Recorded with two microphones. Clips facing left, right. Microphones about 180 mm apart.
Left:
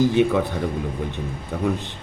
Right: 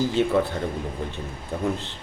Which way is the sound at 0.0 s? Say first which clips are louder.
Left 3 dB; 15° left (ahead or behind).